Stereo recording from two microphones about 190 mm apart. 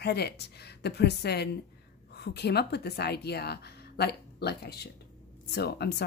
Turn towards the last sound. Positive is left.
turn(degrees=60)  # may be behind; listen again after turning